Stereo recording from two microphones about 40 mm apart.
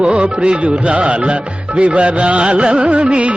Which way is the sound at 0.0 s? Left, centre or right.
Right.